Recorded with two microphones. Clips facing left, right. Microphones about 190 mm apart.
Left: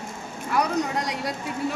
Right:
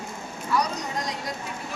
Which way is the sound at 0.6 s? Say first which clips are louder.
Left 7 dB; 65° left (ahead or behind).